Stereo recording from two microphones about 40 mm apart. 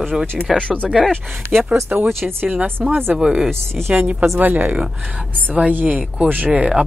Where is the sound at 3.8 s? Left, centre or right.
Right.